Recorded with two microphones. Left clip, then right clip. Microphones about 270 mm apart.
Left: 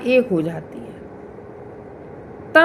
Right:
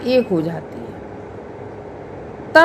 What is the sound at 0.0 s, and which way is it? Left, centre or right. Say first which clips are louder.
Speech: even; right.